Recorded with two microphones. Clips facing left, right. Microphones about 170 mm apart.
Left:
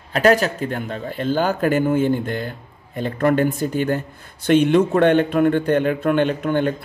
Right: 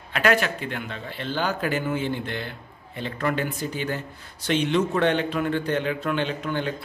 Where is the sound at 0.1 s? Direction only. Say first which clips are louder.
Left 6 dB; 40° left (ahead or behind).